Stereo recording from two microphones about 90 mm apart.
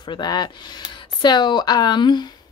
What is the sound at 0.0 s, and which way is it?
A woman's voice, 55° left (ahead or behind).